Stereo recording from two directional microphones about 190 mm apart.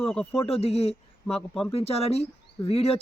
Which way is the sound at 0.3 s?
30° left (ahead or behind).